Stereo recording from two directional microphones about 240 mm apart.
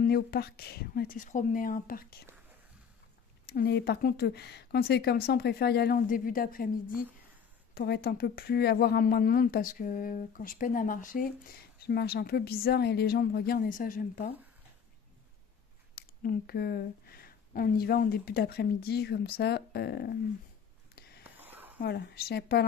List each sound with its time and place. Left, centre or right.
0.0 s speech: left
3.4 s speech: left
15.9 s speech: left
21.4 s a sound: centre
21.8 s speech: left